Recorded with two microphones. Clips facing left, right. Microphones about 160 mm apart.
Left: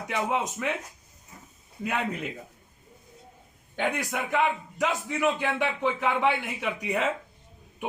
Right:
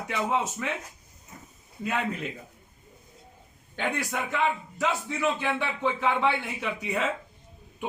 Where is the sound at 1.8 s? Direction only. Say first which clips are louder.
Even; 15° left (ahead or behind).